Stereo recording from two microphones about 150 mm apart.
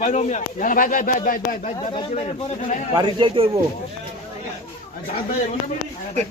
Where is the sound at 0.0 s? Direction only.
50° left (ahead or behind).